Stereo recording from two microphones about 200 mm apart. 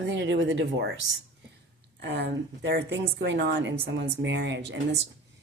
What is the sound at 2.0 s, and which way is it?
Speech, 60° right (ahead or behind).